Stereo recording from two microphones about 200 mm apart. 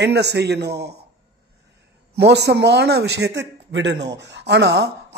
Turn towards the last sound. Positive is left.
turn(degrees=-55)  # may be behind; listen again after turning